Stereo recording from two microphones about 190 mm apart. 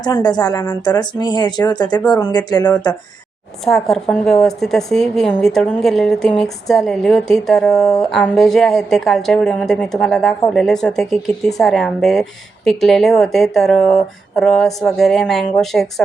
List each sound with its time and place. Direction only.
0.0 s speech: 20° left (ahead or behind)
3.7 s a woman's voice: centre (ahead or behind)